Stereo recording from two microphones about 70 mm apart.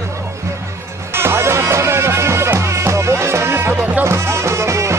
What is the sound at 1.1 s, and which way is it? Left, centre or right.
Music, right.